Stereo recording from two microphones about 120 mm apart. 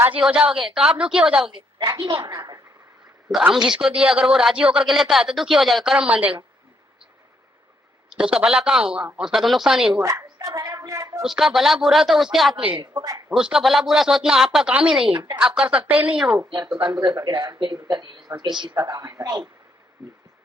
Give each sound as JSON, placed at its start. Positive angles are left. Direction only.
{"t": 0.0, "sound": "a woman's voice", "side_deg": -10}
{"t": 1.5, "sound": "a woman's voice", "side_deg": -45}
{"t": 3.2, "sound": "speech", "side_deg": -15}
{"t": 8.1, "sound": "a woman's voice", "side_deg": -5}
{"t": 9.9, "sound": "speech", "side_deg": -25}
{"t": 11.2, "sound": "speech", "side_deg": 0}
{"t": 12.9, "sound": "speech", "side_deg": -35}
{"t": 13.3, "sound": "speech", "side_deg": -5}
{"t": 15.1, "sound": "speech", "side_deg": -35}
{"t": 15.4, "sound": "a woman's voice", "side_deg": -10}
{"t": 17.0, "sound": "a woman's voice", "side_deg": -40}